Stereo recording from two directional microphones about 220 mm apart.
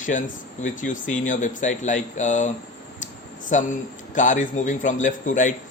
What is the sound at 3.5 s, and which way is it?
A man's voice, 35° left (ahead or behind).